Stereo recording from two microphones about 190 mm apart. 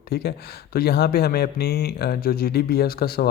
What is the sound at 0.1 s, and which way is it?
Speech, 55° left (ahead or behind).